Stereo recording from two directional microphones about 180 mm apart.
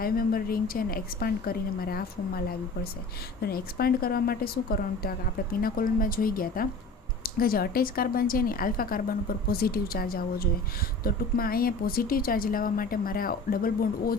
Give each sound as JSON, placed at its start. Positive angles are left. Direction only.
{"t": 0.0, "sound": "a woman's voice", "side_deg": 55}